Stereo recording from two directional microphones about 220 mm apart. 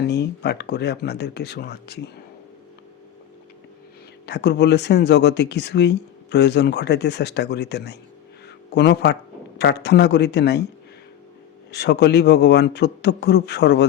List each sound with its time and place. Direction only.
0.0 s speech: 50° left (ahead or behind)
4.3 s speech: 50° left (ahead or behind)
11.7 s speech: 50° left (ahead or behind)